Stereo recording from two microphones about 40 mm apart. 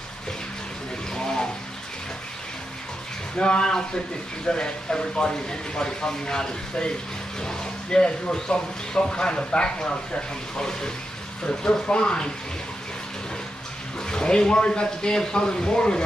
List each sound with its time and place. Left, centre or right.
1.1 s a sound: centre
3.3 s speech: left
14.0 s speech: left